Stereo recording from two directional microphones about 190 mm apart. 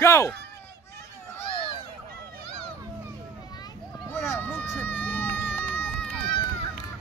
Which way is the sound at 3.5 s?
20° left (ahead or behind).